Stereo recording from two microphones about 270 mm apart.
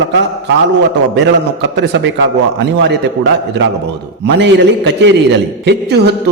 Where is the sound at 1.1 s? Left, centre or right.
Right.